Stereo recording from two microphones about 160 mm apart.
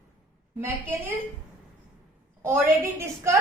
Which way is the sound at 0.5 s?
10° right (ahead or behind).